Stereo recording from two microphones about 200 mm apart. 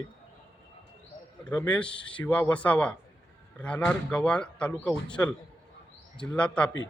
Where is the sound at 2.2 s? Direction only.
5° left (ahead or behind).